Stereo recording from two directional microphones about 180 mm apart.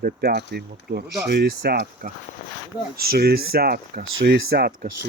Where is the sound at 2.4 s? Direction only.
55° left (ahead or behind).